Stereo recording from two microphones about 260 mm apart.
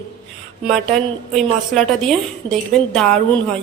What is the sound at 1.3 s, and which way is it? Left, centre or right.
A woman's voice, centre.